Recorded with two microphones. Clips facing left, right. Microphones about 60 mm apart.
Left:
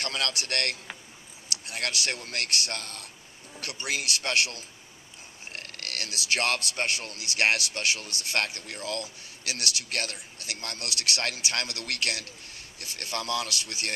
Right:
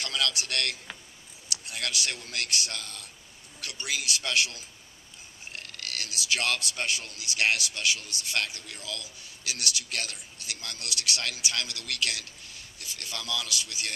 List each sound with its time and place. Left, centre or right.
0.0 s a man's voice: left